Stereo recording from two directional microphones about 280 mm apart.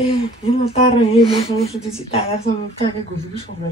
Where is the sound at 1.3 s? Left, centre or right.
Left.